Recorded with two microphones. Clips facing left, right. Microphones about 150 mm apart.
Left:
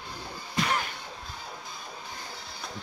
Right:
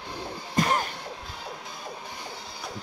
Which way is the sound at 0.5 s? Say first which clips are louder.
Right 4 dB; 40° right (ahead or behind).